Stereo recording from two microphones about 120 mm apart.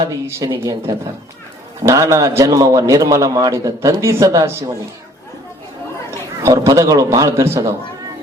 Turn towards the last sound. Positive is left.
turn(degrees=-25)  # may be behind; listen again after turning